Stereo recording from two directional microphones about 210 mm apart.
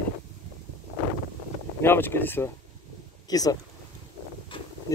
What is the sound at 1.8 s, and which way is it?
Speech, 10° left (ahead or behind).